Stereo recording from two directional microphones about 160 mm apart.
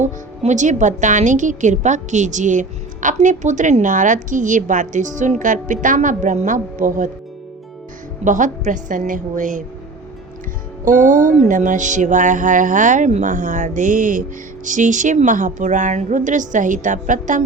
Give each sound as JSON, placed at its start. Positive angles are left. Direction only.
{"t": 0.0, "sound": "a woman's voice", "side_deg": -50}
{"t": 8.2, "sound": "a woman's voice", "side_deg": -50}
{"t": 10.8, "sound": "a woman's voice", "side_deg": -55}